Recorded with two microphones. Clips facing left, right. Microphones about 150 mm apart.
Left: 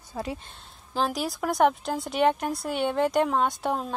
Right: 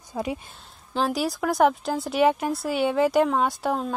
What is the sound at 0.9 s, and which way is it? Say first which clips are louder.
Speech: right 3 dB; centre (ahead or behind).